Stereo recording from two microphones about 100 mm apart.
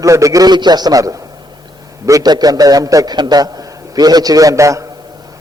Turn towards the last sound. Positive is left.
turn(degrees=-30)  # may be behind; listen again after turning